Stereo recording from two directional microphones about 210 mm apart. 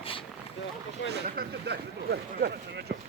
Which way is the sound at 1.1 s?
50° right (ahead or behind).